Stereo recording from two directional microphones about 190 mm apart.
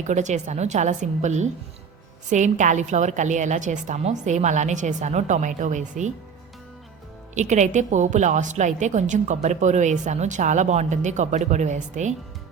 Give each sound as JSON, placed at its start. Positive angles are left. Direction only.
{"t": 0.0, "sound": "a woman's voice", "side_deg": -40}
{"t": 7.3, "sound": "a woman's voice", "side_deg": -40}